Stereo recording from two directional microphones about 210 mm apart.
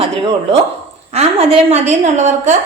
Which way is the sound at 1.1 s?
30° right (ahead or behind).